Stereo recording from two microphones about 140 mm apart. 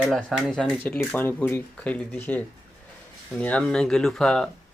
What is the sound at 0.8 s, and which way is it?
Speech, 15° left (ahead or behind).